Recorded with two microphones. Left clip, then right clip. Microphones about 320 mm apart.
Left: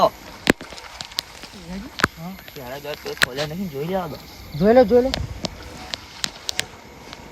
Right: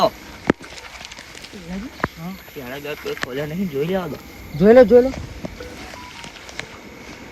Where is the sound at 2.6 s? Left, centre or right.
Left.